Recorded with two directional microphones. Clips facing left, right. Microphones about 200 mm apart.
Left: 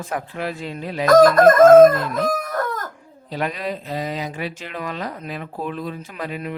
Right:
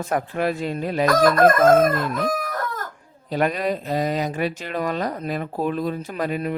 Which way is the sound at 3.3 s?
50° right (ahead or behind).